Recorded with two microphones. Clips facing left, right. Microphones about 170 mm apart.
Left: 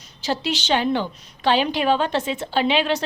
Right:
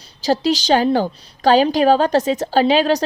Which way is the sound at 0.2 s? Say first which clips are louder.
Right 7 dB; 40° right (ahead or behind).